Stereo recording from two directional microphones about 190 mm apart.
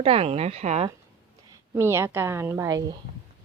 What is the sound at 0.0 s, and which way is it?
Speech, 30° right (ahead or behind).